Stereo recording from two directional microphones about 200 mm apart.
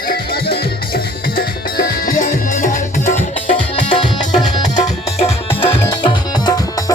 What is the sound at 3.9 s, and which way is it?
Music, 20° left (ahead or behind).